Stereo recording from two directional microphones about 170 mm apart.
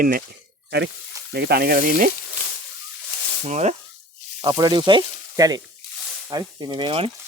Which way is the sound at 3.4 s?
40° right (ahead or behind).